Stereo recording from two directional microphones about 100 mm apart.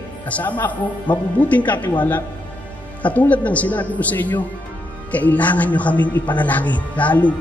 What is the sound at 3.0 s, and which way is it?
A man's voice, 15° left (ahead or behind).